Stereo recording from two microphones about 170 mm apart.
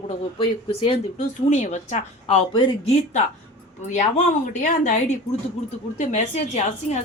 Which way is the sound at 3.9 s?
45° left (ahead or behind).